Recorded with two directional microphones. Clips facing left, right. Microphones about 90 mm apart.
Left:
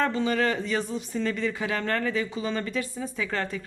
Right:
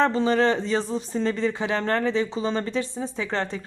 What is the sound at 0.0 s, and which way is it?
Speech, 30° right (ahead or behind).